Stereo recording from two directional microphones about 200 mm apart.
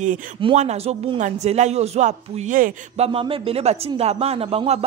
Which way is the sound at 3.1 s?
25° right (ahead or behind).